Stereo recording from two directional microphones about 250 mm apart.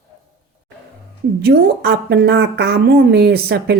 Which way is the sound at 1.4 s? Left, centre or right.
Right.